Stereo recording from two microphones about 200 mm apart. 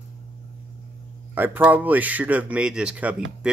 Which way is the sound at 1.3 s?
10° right (ahead or behind).